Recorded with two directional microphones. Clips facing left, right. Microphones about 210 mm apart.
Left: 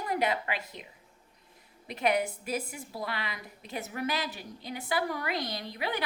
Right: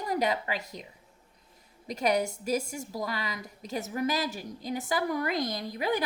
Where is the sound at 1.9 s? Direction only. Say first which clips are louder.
Right 1 dB; 40° right (ahead or behind).